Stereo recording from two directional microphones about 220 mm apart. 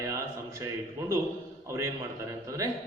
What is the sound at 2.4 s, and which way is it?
Speech, 15° right (ahead or behind).